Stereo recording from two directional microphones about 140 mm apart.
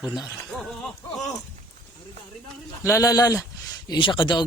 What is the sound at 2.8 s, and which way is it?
Speech, 20° left (ahead or behind).